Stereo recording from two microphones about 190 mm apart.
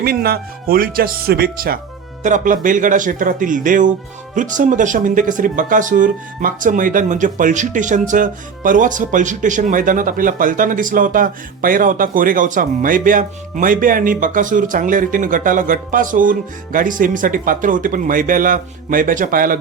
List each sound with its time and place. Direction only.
0.0 s speech: 55° right (ahead or behind)